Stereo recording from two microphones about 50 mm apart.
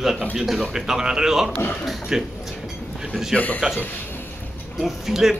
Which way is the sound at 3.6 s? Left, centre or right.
Centre.